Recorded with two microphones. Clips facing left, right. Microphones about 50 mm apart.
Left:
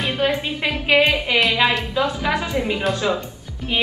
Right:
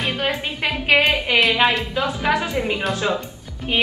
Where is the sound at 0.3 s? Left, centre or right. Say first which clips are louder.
Left 1 dB; centre.